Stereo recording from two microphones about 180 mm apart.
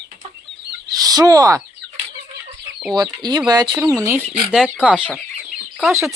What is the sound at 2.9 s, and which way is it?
Speech, 20° right (ahead or behind).